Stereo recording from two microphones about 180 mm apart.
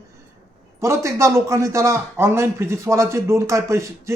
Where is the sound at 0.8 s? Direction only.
15° right (ahead or behind).